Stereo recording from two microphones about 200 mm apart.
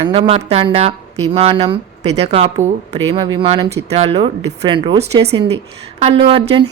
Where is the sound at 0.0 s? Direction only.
30° right (ahead or behind).